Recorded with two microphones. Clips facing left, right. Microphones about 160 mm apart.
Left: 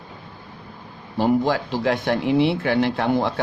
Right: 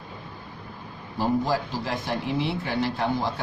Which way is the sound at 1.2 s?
70° left (ahead or behind).